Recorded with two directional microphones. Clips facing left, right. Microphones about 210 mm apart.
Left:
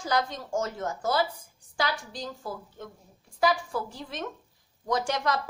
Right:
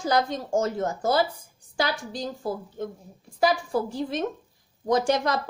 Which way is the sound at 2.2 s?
30° right (ahead or behind).